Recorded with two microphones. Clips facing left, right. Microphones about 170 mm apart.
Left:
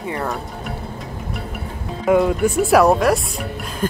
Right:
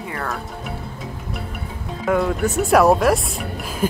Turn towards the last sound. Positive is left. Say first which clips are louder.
# even
turn(degrees=0)  # may be behind; listen again after turning